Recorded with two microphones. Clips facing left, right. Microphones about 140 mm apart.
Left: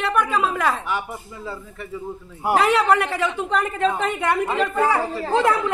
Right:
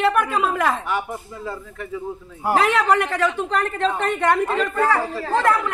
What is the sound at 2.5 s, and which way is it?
A woman's voice, centre (ahead or behind).